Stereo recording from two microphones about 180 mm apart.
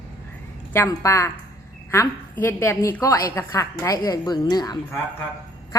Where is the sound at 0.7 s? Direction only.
15° left (ahead or behind).